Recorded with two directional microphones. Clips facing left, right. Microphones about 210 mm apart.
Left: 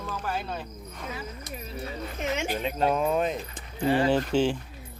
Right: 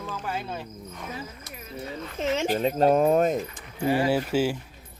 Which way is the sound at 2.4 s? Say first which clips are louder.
Right 6 dB; 40° right (ahead or behind).